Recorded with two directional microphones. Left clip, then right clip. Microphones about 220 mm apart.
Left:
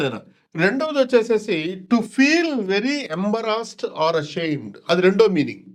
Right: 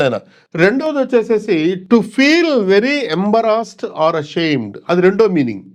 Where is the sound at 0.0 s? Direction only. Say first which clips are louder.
Right 9 dB; 45° right (ahead or behind).